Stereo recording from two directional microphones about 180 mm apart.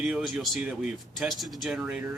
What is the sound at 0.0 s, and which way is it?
Speech, 5° right (ahead or behind).